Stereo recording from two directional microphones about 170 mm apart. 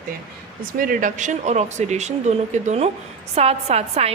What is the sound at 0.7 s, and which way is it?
A woman's voice, 55° right (ahead or behind).